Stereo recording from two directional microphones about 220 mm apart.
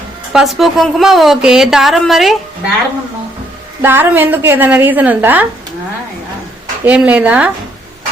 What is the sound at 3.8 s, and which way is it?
A woman's voice, 10° right (ahead or behind).